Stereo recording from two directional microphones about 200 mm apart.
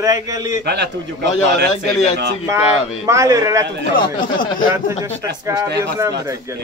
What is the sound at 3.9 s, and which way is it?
Speech, 45° left (ahead or behind).